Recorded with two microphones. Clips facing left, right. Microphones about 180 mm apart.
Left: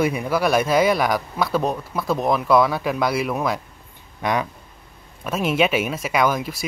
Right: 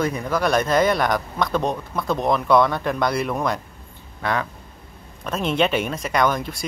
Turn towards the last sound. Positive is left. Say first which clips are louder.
# even
turn(degrees=5)  # may be behind; listen again after turning